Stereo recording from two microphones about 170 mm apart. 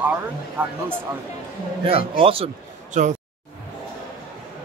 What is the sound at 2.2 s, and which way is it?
Speech, 35° right (ahead or behind).